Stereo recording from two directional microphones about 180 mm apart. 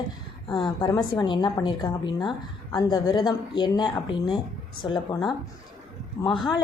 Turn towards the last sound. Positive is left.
turn(degrees=0)  # may be behind; listen again after turning